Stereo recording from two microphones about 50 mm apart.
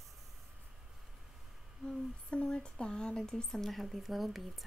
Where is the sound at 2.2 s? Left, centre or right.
Left; by 4.7 s centre.